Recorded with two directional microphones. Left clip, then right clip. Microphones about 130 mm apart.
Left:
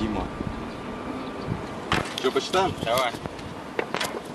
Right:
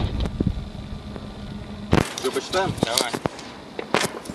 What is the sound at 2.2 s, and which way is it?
Speech, 15° left (ahead or behind).